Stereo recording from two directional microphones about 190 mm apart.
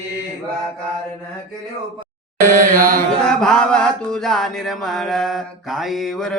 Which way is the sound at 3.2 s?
Centre (ahead or behind).